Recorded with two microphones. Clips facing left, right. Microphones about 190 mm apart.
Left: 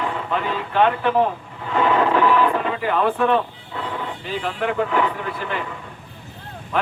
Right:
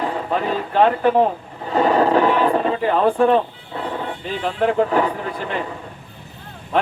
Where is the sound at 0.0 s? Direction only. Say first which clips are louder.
Right 3 dB; 40° right (ahead or behind).